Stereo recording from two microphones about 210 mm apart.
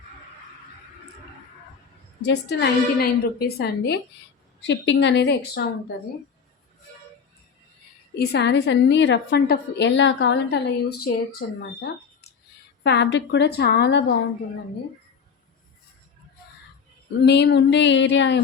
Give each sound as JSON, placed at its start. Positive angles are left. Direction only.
{"t": 2.2, "sound": "a woman's voice", "side_deg": 55}
{"t": 8.2, "sound": "a woman's voice", "side_deg": 55}
{"t": 17.2, "sound": "a woman's voice", "side_deg": 55}